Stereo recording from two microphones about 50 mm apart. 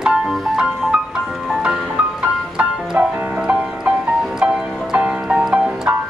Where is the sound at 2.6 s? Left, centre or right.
Right.